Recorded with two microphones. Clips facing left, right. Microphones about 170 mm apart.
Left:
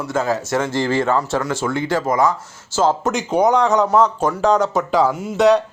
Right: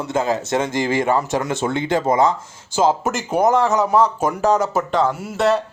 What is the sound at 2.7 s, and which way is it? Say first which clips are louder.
Speech: even; 10° right (ahead or behind).